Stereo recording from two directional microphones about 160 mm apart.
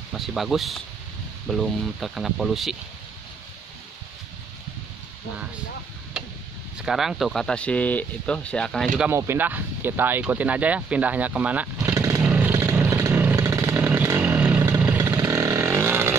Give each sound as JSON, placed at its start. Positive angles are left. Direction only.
{"t": 0.1, "sound": "speech", "side_deg": 0}
{"t": 6.8, "sound": "speech", "side_deg": 0}
{"t": 12.2, "sound": "vehicle", "side_deg": -10}